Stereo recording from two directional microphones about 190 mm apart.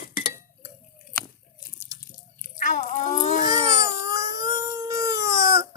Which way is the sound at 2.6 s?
40° left (ahead or behind).